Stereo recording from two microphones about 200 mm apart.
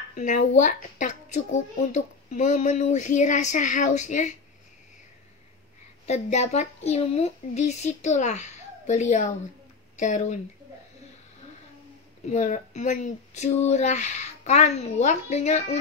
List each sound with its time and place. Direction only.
0.1 s a child's voice: 40° left (ahead or behind)
6.0 s a child's voice: 35° left (ahead or behind)
12.3 s a child's voice: 35° left (ahead or behind)